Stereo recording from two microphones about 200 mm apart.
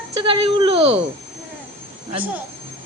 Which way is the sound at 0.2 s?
25° right (ahead or behind).